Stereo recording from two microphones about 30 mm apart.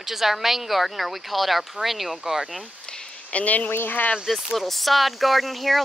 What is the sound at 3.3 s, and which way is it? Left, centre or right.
Speech, left.